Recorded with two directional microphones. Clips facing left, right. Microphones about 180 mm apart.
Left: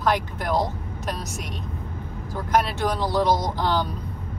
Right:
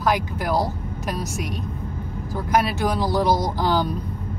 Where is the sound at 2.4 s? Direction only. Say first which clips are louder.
Right 1 dB; 10° right (ahead or behind).